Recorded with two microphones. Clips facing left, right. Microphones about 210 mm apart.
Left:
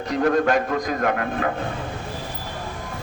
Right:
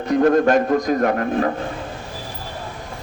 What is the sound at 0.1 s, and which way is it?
A man's voice, 45° right (ahead or behind).